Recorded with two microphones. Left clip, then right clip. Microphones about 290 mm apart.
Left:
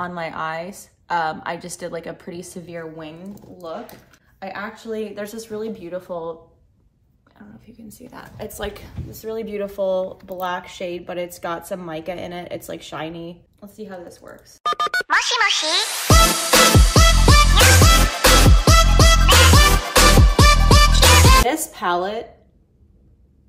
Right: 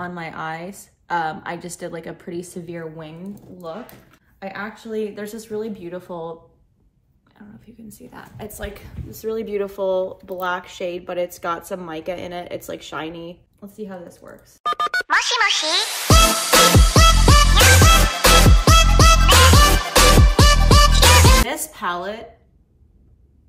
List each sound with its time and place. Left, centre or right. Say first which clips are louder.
0.0 s a woman's voice: left 3 dB; centre
7.3 s speech: even; centre
9.1 s a woman's voice: right 3 dB; centre
10.2 s a sound: right 1 dB; centre
21.5 s speech: left 4 dB; centre